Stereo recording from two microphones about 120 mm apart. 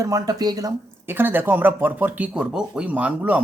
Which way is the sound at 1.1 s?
20° right (ahead or behind).